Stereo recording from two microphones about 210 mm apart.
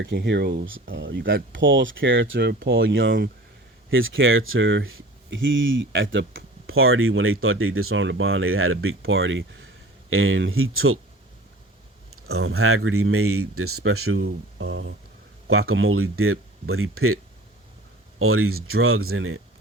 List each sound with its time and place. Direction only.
0.0 s speech: 55° right (ahead or behind); by 11.0 s 75° right (ahead or behind)
12.1 s speech: 85° right
14.6 s speech: 70° right (ahead or behind)
15.4 s speech: 85° right
18.2 s speech: 90° right